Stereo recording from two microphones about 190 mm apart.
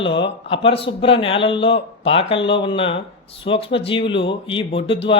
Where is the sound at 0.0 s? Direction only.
25° left (ahead or behind).